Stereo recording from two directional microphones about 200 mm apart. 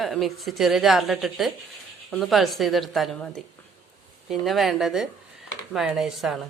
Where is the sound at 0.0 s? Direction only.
Centre (ahead or behind).